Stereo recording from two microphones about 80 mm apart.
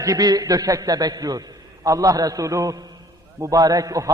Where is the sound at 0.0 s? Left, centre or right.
Right.